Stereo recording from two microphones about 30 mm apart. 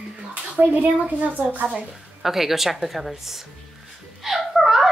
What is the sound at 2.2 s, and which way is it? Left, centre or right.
A woman's voice, centre.